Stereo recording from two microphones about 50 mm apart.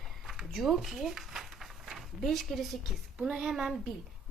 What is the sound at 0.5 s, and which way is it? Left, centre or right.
Speech, centre.